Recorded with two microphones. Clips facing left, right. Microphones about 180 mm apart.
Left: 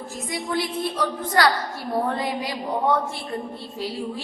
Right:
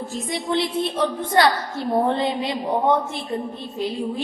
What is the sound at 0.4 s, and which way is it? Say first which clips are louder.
A woman's voice: right 3 dB; 25° right (ahead or behind).